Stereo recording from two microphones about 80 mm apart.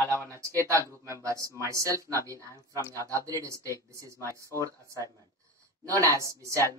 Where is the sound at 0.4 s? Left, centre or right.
Right.